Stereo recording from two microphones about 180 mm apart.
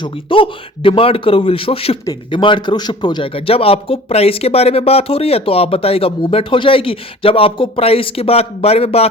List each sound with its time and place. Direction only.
0.0 s a man's voice: 30° left (ahead or behind)